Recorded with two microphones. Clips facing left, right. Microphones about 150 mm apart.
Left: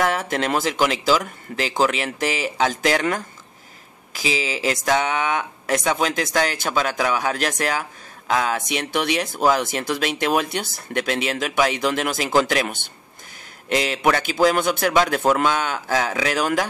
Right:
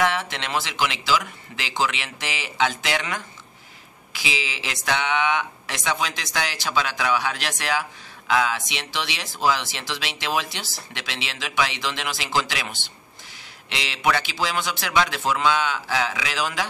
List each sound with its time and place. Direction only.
0.0 s speech: 45° left (ahead or behind)